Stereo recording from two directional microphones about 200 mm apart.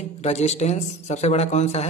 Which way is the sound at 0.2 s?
35° left (ahead or behind).